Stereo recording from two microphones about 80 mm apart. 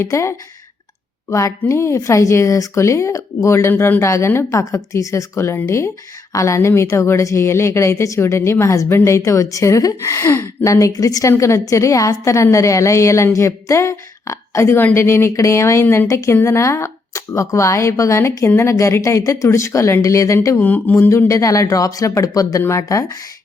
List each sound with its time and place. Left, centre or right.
0.0 s speech: left
20.6 s speech: left
21.2 s speech: left